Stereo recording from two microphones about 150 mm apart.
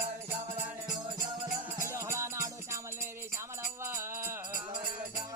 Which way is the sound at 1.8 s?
20° right (ahead or behind).